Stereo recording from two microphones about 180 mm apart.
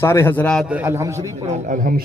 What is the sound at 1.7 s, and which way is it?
Speech, 50° right (ahead or behind).